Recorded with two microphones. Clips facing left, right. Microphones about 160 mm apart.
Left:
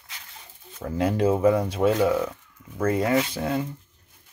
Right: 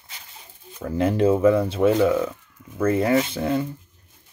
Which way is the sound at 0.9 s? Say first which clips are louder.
Right 3 dB; 25° right (ahead or behind).